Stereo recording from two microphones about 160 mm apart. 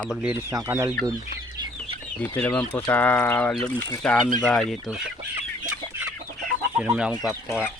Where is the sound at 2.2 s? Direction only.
10° left (ahead or behind).